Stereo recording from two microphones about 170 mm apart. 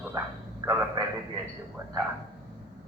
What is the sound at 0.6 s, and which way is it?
Speech, 20° right (ahead or behind).